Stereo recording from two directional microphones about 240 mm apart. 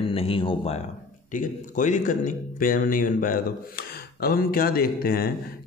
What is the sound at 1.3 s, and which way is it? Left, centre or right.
Speech, left.